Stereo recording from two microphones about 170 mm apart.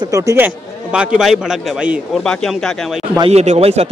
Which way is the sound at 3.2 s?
40° right (ahead or behind).